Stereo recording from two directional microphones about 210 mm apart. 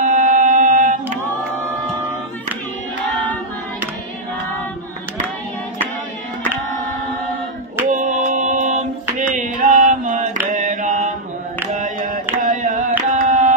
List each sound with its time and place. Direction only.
0.0 s singing: 35° right (ahead or behind)
7.9 s music: 35° right (ahead or behind)
9.3 s mantra: 35° right (ahead or behind)
11.7 s carnatic music: 40° right (ahead or behind)